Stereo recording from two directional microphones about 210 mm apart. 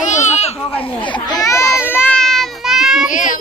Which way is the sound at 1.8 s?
5° left (ahead or behind).